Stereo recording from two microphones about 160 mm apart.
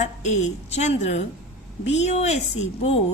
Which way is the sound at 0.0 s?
45° left (ahead or behind).